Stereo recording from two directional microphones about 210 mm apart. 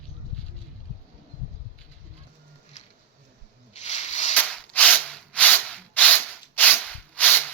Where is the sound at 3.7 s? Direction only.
30° left (ahead or behind).